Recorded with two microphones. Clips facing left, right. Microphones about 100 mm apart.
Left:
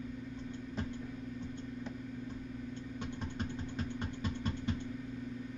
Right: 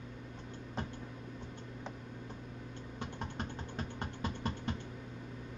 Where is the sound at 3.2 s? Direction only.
50° right (ahead or behind).